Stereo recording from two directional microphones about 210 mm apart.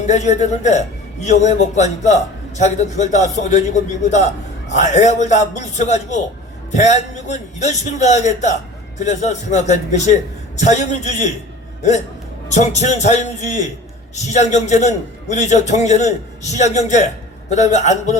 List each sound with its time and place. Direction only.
0.1 s a man's voice: 35° left (ahead or behind)
12.5 s a man's voice: 35° left (ahead or behind)